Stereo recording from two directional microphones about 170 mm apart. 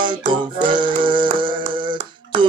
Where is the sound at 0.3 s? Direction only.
30° right (ahead or behind).